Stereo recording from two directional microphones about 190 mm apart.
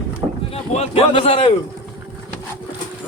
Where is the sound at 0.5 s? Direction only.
30° left (ahead or behind).